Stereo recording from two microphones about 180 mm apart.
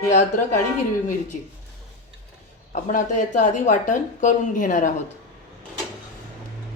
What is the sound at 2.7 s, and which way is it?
A woman's voice, 45° left (ahead or behind).